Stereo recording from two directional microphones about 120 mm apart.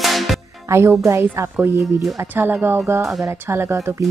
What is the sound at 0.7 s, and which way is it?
Speech, 25° right (ahead or behind).